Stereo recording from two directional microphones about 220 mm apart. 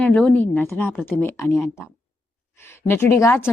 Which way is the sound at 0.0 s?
5° left (ahead or behind).